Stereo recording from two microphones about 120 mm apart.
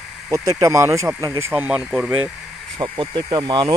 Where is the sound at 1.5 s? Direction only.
10° right (ahead or behind).